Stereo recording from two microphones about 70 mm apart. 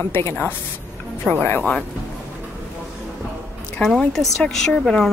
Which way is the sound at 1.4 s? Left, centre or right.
Left.